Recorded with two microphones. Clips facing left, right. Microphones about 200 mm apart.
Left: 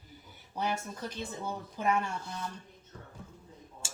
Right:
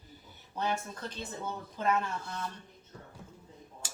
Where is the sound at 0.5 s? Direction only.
10° left (ahead or behind).